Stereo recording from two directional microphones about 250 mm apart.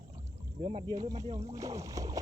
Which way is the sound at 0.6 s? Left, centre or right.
Centre.